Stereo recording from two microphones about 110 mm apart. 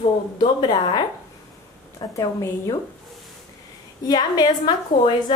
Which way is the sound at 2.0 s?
35° left (ahead or behind).